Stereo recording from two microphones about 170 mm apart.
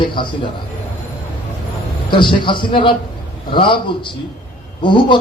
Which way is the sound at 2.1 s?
30° left (ahead or behind).